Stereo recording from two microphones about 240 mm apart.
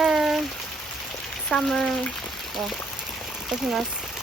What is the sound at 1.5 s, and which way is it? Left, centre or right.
Speech, centre.